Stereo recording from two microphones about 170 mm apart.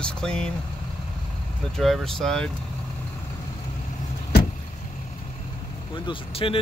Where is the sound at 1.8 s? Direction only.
Centre (ahead or behind).